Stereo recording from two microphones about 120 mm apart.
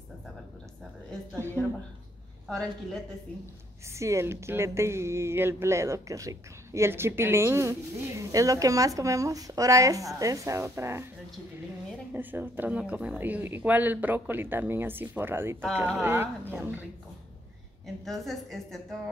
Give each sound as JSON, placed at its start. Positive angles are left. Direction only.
{"t": 2.4, "sound": "a woman's voice", "side_deg": 5}
{"t": 3.9, "sound": "speech", "side_deg": -25}
{"t": 12.1, "sound": "speech", "side_deg": -15}
{"t": 17.8, "sound": "a woman's voice", "side_deg": 0}